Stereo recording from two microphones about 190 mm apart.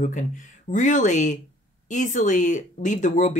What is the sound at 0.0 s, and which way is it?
Speech, 40° left (ahead or behind).